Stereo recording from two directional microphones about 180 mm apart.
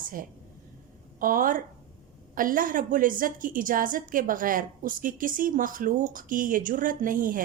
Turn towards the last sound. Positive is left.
turn(degrees=-50)  # may be behind; listen again after turning